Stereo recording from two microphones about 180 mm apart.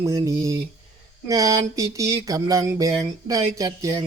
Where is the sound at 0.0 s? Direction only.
20° right (ahead or behind).